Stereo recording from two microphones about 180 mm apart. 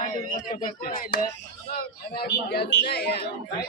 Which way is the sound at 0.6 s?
55° left (ahead or behind).